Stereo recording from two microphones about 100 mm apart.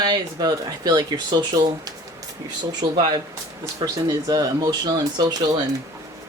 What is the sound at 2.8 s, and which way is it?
Speech, 40° right (ahead or behind).